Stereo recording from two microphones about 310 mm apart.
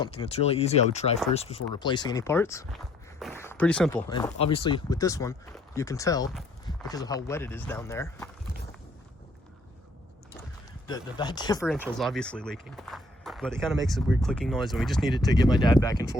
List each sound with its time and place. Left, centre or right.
0.0 s speech: centre
4.1 s speech: centre
10.8 s speech: centre
11.6 s speech: centre
15.3 s speech: centre